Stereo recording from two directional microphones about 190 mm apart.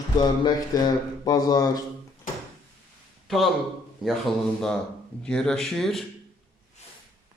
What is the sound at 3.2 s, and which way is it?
Speech, centre (ahead or behind).